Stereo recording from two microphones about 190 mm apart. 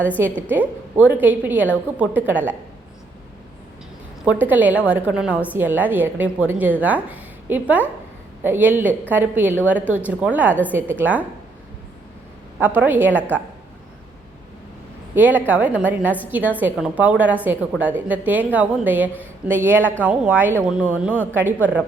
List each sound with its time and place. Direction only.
0.2 s a woman's voice: 10° right (ahead or behind)
4.3 s a woman's voice: 10° right (ahead or behind)
12.5 s a woman's voice: 10° right (ahead or behind)
15.1 s a woman's voice: 10° right (ahead or behind)